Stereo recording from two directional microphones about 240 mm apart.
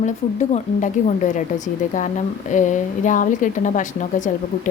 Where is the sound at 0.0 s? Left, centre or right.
Left.